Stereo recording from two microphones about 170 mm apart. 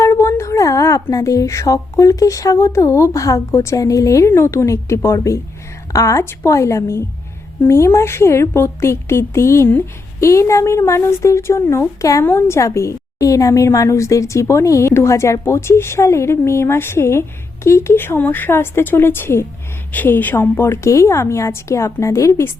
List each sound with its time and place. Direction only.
0.0 s a woman's voice: 15° left (ahead or behind)